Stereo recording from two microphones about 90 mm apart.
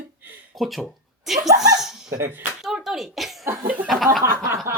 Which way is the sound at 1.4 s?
40° right (ahead or behind).